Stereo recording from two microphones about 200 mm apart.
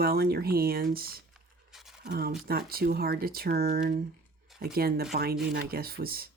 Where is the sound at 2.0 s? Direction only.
55° right (ahead or behind).